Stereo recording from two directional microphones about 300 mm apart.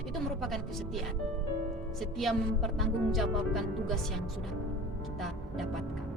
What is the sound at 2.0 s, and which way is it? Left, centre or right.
Speech, centre.